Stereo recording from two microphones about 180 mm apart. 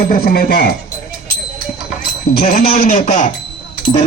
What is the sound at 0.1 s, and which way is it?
Speech, 55° left (ahead or behind).